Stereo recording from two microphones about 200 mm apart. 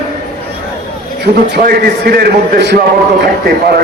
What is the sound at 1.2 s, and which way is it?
A man's voice, 50° right (ahead or behind).